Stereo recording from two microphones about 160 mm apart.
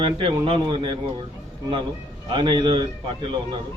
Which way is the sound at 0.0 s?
35° right (ahead or behind).